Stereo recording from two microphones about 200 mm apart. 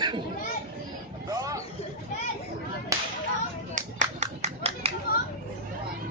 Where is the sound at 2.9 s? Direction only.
15° right (ahead or behind).